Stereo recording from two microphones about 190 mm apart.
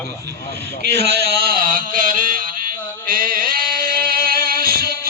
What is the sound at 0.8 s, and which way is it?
Speech, 60° right (ahead or behind).